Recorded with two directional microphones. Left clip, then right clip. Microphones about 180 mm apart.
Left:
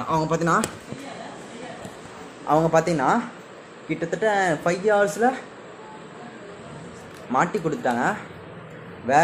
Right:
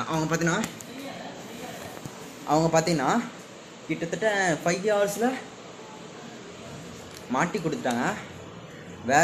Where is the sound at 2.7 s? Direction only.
15° right (ahead or behind).